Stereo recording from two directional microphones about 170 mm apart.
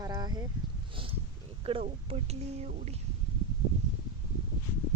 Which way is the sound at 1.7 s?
35° right (ahead or behind).